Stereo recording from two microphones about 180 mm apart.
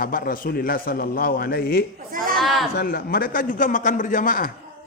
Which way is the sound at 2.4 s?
Centre (ahead or behind).